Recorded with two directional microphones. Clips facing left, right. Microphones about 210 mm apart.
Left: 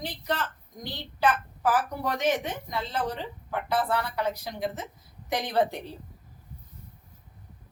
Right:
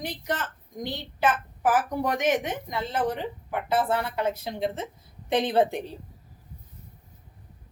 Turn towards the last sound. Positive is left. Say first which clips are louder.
# right 4 dB
turn(degrees=-25)  # may be behind; listen again after turning